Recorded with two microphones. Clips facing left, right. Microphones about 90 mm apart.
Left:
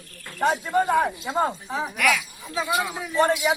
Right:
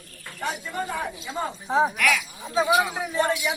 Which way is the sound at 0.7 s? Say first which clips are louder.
Left 9 dB; 50° left (ahead or behind).